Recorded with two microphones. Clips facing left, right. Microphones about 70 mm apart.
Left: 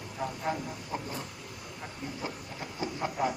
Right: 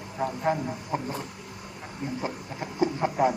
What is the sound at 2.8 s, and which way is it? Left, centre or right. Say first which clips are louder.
Chicken: right 8 dB; right.